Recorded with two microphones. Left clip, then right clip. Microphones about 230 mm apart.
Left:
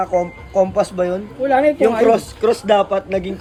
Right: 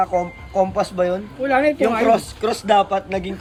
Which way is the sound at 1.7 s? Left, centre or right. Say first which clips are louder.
Left 3 dB; right.